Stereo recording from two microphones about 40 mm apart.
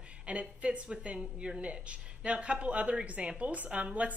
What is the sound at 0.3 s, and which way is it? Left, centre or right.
A woman's voice, right.